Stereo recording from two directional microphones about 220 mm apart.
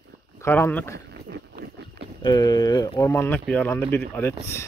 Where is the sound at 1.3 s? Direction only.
45° right (ahead or behind).